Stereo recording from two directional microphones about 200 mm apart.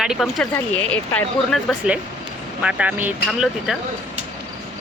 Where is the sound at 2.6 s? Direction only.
5° right (ahead or behind).